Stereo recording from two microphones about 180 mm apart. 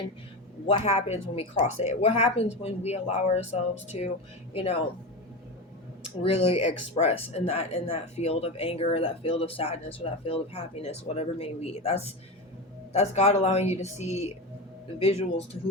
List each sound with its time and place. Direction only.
0.7 s speech: 35° left (ahead or behind)
6.2 s speech: 35° left (ahead or behind)